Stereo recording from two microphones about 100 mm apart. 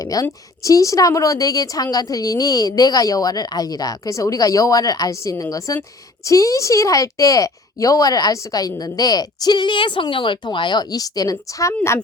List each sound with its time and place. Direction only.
0.0 s a woman's voice: 35° left (ahead or behind)